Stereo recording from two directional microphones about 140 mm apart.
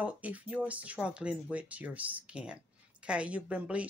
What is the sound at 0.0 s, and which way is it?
Speech, 10° right (ahead or behind).